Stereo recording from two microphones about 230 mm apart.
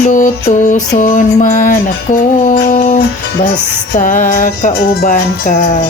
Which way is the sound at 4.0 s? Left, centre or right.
Left.